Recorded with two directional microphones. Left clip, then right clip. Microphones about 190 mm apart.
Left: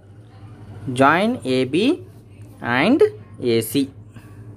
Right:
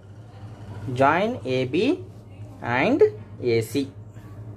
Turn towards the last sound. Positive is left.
turn(degrees=30)  # may be behind; listen again after turning